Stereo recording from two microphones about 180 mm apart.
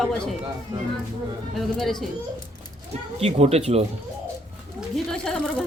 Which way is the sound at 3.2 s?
35° right (ahead or behind).